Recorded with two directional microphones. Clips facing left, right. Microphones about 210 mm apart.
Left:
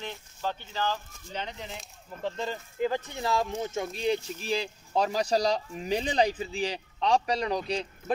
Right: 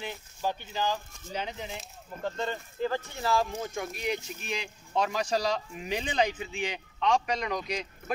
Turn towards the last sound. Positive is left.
turn(degrees=30)  # may be behind; listen again after turning